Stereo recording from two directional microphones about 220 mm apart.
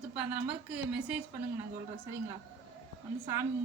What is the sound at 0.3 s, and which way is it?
Speech, 5° right (ahead or behind).